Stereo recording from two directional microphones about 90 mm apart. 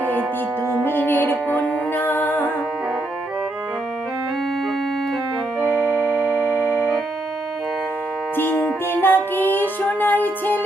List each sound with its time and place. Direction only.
0.9 s music: 20° left (ahead or behind)
8.4 s music: 20° left (ahead or behind)